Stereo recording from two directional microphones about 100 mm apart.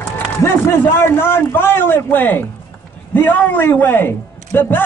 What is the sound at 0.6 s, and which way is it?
A man's voice, 25° left (ahead or behind).